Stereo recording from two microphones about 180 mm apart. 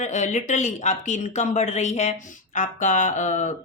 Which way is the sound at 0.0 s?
40° left (ahead or behind).